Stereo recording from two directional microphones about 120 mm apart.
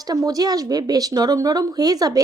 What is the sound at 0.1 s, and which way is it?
Speech, 30° right (ahead or behind).